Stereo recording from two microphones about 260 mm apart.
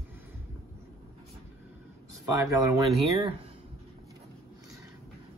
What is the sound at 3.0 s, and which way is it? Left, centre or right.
Speech, right.